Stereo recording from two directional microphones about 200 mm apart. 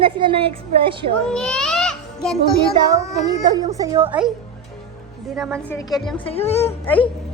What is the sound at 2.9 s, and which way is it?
Speech, 20° right (ahead or behind).